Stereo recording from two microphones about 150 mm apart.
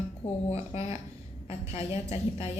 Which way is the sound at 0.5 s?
45° left (ahead or behind).